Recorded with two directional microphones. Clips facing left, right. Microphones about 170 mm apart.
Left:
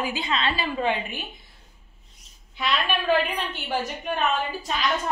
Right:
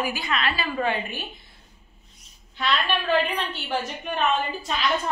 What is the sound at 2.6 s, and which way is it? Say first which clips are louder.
A woman's voice: right 1 dB; 10° left (ahead or behind).